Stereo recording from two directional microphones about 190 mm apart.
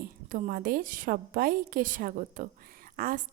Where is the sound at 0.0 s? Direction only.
45° right (ahead or behind).